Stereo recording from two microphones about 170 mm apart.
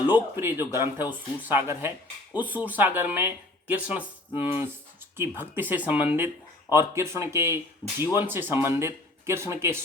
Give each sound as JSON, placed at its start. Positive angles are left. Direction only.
{"t": 0.1, "sound": "speech", "side_deg": -15}
{"t": 5.1, "sound": "speech", "side_deg": -15}